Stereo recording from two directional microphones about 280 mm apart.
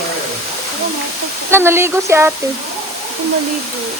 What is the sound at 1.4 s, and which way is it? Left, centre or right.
Speech, centre.